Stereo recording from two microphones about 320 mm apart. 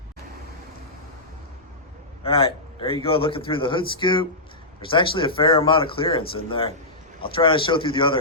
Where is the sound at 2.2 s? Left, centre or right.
Centre.